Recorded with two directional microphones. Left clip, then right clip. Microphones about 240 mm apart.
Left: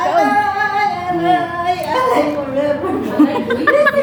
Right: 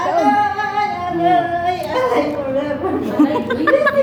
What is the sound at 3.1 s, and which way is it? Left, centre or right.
Speech, centre.